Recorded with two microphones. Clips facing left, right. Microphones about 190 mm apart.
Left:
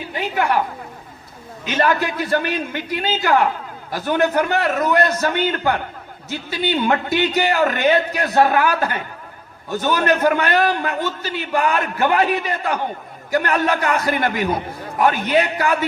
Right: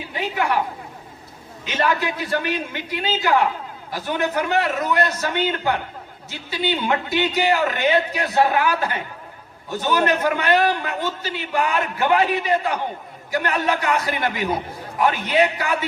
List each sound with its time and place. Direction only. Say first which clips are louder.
1.6 s a man's voice: left 3 dB; 45° left (ahead or behind)